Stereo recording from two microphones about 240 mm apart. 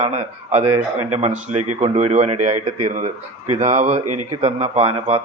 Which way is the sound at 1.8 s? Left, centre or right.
Right.